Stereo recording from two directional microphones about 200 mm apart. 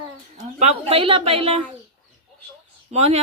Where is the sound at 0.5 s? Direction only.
30° right (ahead or behind).